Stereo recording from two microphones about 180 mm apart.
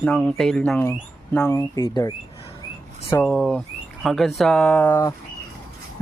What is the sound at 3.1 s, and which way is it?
Speech, 10° left (ahead or behind).